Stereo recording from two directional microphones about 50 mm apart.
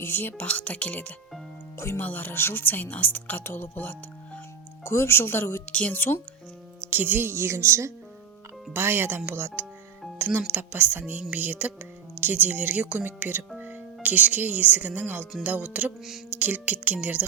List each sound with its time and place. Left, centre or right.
0.0 s speech: left
4.8 s speech: left
5.7 s speech: left
6.9 s speech: right
7.3 s speech: right
8.7 s speech: right
10.2 s speech: right